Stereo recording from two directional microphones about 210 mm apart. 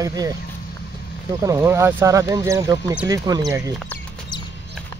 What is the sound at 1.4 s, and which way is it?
Speech, 15° right (ahead or behind).